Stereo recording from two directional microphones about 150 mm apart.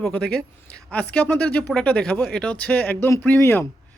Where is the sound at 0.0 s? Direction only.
5° left (ahead or behind).